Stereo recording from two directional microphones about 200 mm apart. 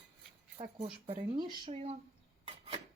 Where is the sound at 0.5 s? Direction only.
35° right (ahead or behind).